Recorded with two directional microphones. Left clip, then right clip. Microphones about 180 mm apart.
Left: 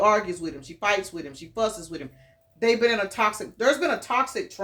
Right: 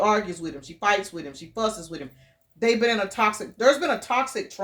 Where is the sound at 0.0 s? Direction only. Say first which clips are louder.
Left 1 dB; 30° right (ahead or behind).